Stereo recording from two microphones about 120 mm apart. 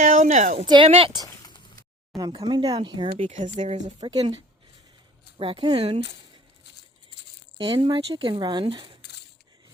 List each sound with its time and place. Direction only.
0.0 s a sound: 85° right
0.9 s speech: 50° right (ahead or behind)
1.4 s a sound: 35° left (ahead or behind)
2.1 s speech: centre (ahead or behind)
2.5 s speech: 35° right (ahead or behind)
3.3 s speech: 90° right
4.1 s speech: 50° right (ahead or behind)
5.4 s speech: 45° right (ahead or behind)
7.6 s speech: 50° right (ahead or behind)